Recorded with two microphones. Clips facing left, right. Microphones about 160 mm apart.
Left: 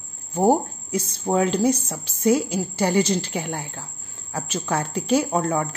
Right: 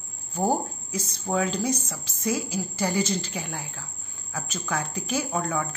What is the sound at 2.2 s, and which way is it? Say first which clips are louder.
Speech: left 8 dB; 65° left (ahead or behind).